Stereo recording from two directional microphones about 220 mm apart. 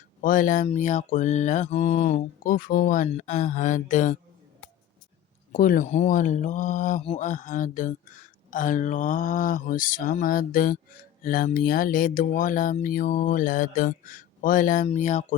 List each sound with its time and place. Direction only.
0.2 s speech: 40° left (ahead or behind)
5.5 s speech: 40° left (ahead or behind)